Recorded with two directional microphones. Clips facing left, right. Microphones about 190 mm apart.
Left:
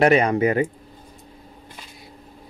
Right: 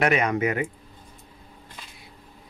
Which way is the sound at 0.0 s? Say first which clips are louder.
Left 6 dB; 30° left (ahead or behind).